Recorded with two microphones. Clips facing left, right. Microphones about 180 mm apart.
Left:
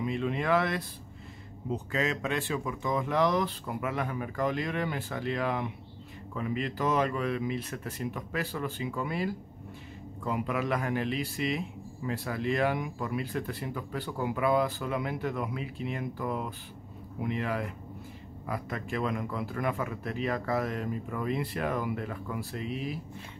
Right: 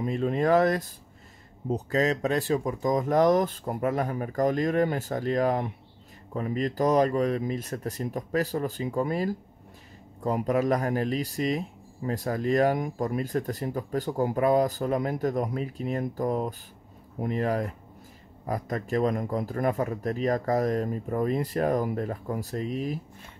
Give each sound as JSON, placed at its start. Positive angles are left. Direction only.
{"t": 0.0, "sound": "speech", "side_deg": -40}